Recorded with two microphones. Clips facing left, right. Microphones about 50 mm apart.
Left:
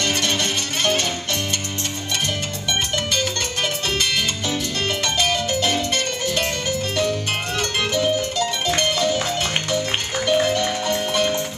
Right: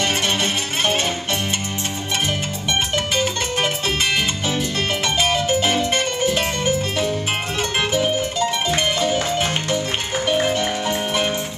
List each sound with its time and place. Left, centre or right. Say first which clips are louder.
0.4 s music: right 1 dB; centre
5.5 s music: right 3 dB; centre